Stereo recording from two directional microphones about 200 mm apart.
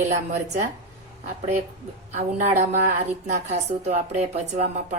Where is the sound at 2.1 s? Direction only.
35° right (ahead or behind).